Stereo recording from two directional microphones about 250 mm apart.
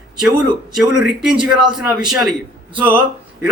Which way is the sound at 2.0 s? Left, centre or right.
Centre.